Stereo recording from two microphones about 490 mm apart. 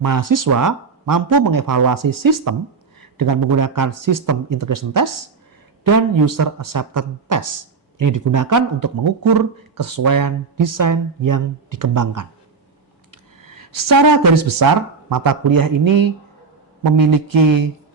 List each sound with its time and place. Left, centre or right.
0.0 s speech: right
13.1 s a sound: right
15.1 s speech: right